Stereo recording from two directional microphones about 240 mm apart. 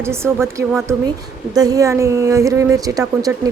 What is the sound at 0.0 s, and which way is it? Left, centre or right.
A woman's voice, centre.